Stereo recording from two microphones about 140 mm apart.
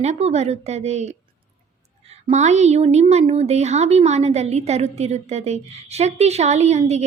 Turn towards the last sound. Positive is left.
turn(degrees=-50)  # may be behind; listen again after turning